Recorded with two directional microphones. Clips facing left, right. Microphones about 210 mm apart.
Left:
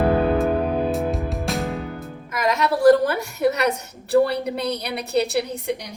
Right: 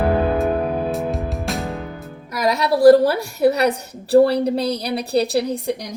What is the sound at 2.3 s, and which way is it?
A woman's voice, 35° right (ahead or behind).